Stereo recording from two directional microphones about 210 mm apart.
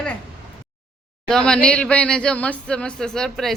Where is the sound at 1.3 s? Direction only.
5° left (ahead or behind).